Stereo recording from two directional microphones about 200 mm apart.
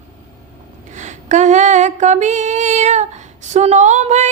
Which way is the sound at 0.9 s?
35° right (ahead or behind).